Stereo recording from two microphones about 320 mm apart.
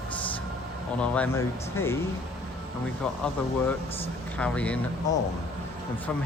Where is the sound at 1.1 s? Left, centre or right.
Centre.